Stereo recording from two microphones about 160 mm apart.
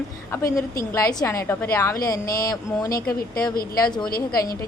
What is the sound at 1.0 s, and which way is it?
Speech, 20° left (ahead or behind).